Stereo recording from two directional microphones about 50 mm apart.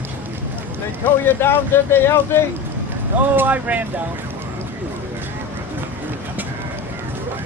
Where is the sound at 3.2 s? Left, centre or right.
Right.